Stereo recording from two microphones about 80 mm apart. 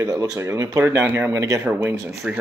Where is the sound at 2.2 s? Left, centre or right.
Centre.